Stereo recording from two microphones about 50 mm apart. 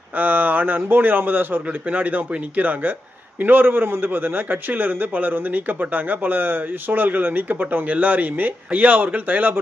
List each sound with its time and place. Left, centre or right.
0.2 s a man's voice: right